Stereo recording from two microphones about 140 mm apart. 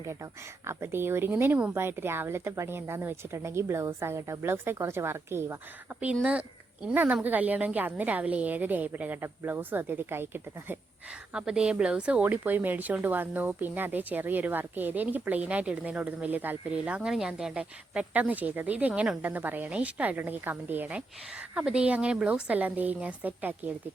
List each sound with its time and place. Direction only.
0.0 s speech: 20° right (ahead or behind)